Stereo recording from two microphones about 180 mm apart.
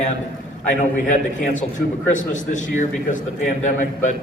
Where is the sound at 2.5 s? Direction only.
45° left (ahead or behind).